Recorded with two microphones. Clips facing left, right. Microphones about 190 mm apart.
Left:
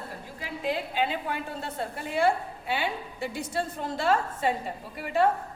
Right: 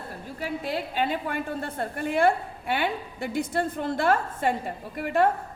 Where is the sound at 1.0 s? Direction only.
50° right (ahead or behind).